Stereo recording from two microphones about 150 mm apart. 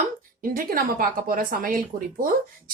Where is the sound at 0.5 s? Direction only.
70° right (ahead or behind).